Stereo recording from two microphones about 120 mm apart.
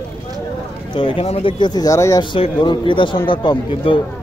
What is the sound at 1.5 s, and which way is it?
Speech, 35° left (ahead or behind).